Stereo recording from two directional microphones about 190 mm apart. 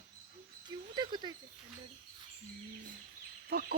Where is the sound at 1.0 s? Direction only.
20° right (ahead or behind).